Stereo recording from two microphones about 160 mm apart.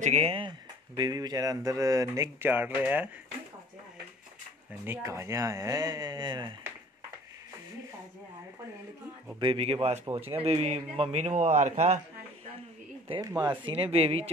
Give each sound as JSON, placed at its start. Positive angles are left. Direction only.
{"t": 0.0, "sound": "speech", "side_deg": -40}
{"t": 4.8, "sound": "speech", "side_deg": -15}
{"t": 9.4, "sound": "a man's voice", "side_deg": -35}
{"t": 13.2, "sound": "speech", "side_deg": -15}
{"t": 13.7, "sound": "a man's voice", "side_deg": -35}